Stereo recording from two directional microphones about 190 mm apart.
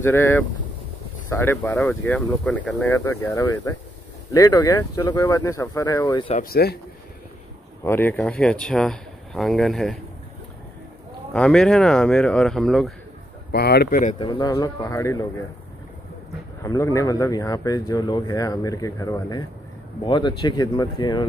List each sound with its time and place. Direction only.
0.0 s speech: 10° left (ahead or behind)
6.3 s speech: 50° left (ahead or behind)
7.8 s speech: 10° left (ahead or behind)
11.3 s speech: 5° left (ahead or behind)
13.5 s speech: 55° left (ahead or behind)
14.1 s speech: 25° left (ahead or behind)
16.6 s speech: 15° left (ahead or behind)